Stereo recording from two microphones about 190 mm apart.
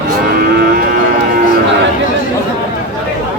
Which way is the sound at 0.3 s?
55° right (ahead or behind).